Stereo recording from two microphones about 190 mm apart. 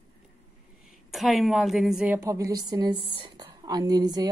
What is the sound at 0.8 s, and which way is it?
A woman's voice, centre (ahead or behind).